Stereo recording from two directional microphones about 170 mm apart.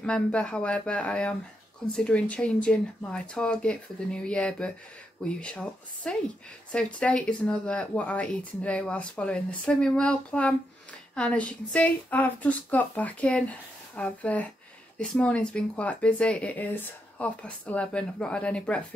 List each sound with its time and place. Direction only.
0.0 s speech: 5° left (ahead or behind)